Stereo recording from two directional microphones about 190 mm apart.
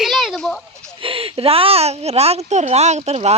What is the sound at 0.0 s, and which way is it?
Children playing, centre (ahead or behind).